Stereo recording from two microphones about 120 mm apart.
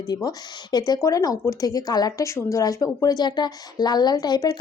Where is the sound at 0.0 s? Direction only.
30° left (ahead or behind).